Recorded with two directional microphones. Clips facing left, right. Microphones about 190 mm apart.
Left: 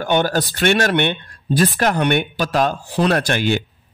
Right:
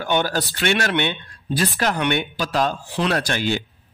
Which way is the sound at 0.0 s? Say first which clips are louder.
Left 4 dB; 45° left (ahead or behind).